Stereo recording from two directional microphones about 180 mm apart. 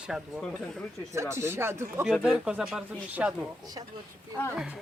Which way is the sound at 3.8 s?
20° right (ahead or behind).